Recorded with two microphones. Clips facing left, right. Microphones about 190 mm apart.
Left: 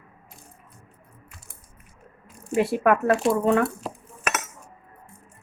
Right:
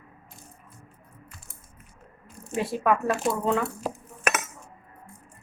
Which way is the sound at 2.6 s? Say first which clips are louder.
Left 4 dB; 65° left (ahead or behind).